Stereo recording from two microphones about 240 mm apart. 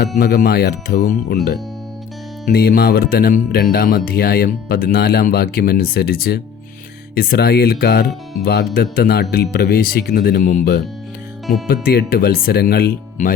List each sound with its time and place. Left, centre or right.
0.2 s speech: left
2.5 s speech: left
11.4 s speech: centre
11.7 s speech: left